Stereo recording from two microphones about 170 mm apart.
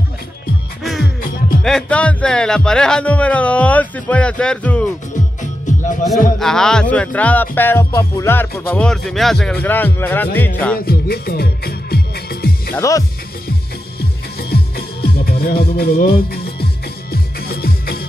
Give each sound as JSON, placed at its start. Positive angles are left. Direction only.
{"t": 0.8, "sound": "music", "side_deg": 0}
{"t": 1.6, "sound": "speech", "side_deg": 5}
{"t": 5.1, "sound": "music", "side_deg": 45}
{"t": 6.4, "sound": "speech", "side_deg": 5}
{"t": 10.9, "sound": "music", "side_deg": 65}
{"t": 12.7, "sound": "speech", "side_deg": 20}
{"t": 14.5, "sound": "music", "side_deg": 65}